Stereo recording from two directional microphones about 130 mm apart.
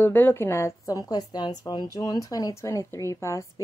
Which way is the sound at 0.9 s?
30° left (ahead or behind).